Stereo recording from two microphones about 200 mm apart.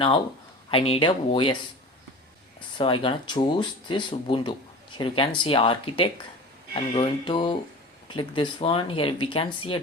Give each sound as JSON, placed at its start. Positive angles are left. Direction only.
{"t": 0.7, "sound": "speech", "side_deg": 25}
{"t": 2.6, "sound": "speech", "side_deg": 25}